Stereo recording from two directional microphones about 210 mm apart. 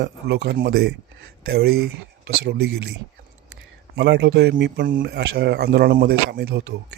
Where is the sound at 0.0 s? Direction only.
55° right (ahead or behind).